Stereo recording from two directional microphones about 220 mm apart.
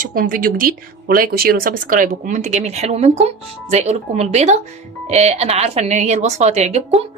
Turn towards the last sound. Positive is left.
turn(degrees=-30)  # may be behind; listen again after turning